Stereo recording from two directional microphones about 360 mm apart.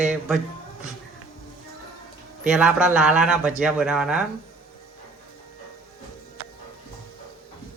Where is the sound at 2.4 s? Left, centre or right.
Centre.